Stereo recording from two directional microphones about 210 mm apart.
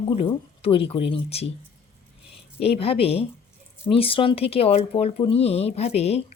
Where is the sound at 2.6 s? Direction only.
30° left (ahead or behind).